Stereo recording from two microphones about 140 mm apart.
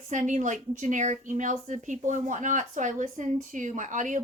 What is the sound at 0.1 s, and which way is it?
Speech, 60° right (ahead or behind).